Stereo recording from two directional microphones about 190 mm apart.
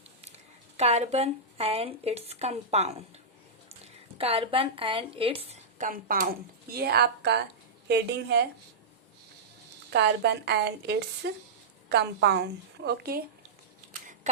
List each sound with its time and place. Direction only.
0.8 s a woman's voice: 35° right (ahead or behind)
4.2 s a woman's voice: 30° right (ahead or behind); by 8.4 s 60° right (ahead or behind)
9.9 s a woman's voice: 60° right (ahead or behind)